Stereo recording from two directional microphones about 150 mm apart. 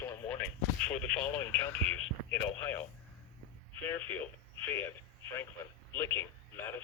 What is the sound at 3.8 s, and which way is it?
Speech, 10° left (ahead or behind).